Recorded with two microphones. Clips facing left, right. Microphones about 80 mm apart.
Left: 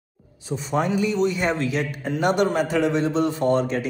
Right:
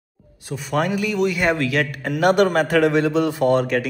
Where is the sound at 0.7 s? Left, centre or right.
Right.